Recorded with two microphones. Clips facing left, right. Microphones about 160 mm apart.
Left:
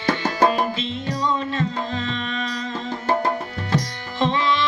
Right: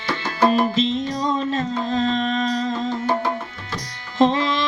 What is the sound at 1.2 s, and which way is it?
Music, 40° right (ahead or behind).